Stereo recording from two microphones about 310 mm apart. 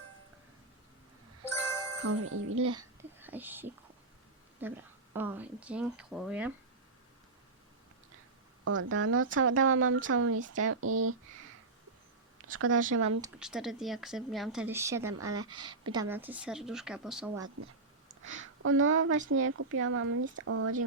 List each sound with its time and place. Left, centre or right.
1.5 s music: centre
2.0 s speech: right
2.7 s a sound: centre
4.6 s speech: centre
8.6 s speech: right
12.5 s speech: right
12.9 s speech: right
13.2 s speech: centre
18.2 s speech: right